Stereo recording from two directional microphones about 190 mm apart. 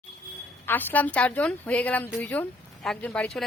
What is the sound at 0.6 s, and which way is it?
A woman's voice, 10° left (ahead or behind).